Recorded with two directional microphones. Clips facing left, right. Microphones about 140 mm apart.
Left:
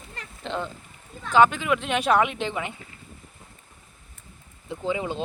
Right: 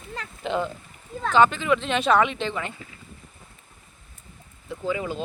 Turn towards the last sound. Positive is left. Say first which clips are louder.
# even
turn(degrees=25)  # may be behind; listen again after turning